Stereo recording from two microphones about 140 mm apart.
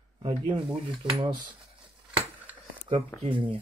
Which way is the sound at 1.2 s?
35° right (ahead or behind).